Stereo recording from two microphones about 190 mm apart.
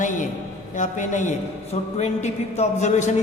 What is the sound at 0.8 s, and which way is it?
A man's voice, 40° left (ahead or behind).